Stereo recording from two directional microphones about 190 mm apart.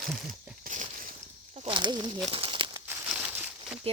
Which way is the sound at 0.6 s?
45° right (ahead or behind).